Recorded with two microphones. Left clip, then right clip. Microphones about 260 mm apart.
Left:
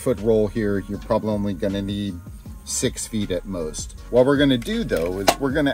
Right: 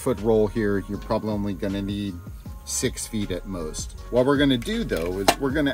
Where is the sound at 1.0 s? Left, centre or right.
Centre.